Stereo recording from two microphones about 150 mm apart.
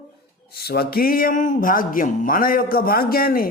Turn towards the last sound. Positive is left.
turn(degrees=80)